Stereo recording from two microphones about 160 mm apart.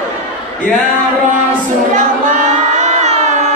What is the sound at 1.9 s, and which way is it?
Music, 50° right (ahead or behind).